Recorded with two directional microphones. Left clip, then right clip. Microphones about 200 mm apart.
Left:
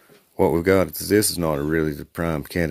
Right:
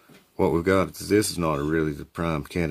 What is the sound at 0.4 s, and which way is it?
Speech, 20° left (ahead or behind).